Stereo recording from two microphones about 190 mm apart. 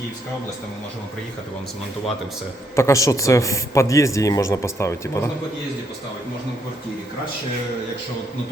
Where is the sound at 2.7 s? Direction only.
15° left (ahead or behind).